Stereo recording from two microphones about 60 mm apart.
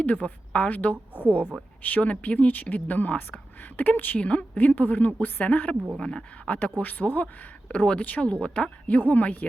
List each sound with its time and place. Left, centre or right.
0.0 s a woman's voice: left
6.0 s speech: centre
6.7 s speech: left